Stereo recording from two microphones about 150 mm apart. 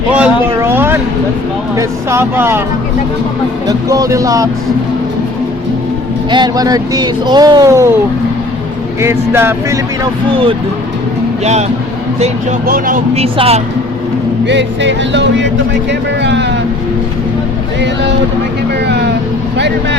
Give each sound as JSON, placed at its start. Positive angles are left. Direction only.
{"t": 0.1, "sound": "a sound", "side_deg": -10}
{"t": 1.7, "sound": "speech", "side_deg": -20}
{"t": 3.7, "sound": "speech", "side_deg": -25}
{"t": 6.3, "sound": "speech", "side_deg": -25}
{"t": 9.0, "sound": "speech", "side_deg": -15}
{"t": 12.6, "sound": "speech", "side_deg": -70}
{"t": 13.1, "sound": "speech", "side_deg": -40}